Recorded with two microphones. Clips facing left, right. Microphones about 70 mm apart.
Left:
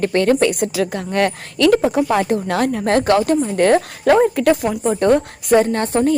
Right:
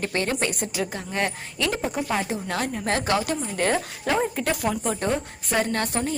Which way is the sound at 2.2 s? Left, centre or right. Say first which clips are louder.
Left 10 dB; left.